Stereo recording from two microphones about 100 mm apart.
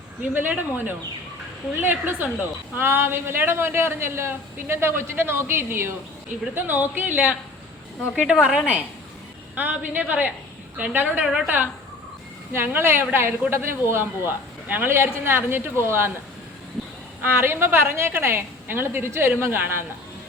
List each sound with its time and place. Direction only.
0.2 s a woman's voice: 15° right (ahead or behind)
1.8 s a man's voice: 20° right (ahead or behind)
12.5 s a man's voice: 25° right (ahead or behind)
17.4 s a man's voice: 25° right (ahead or behind)